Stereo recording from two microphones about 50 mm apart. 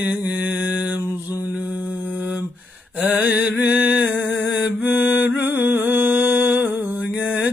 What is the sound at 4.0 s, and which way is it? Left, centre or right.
Humming, right.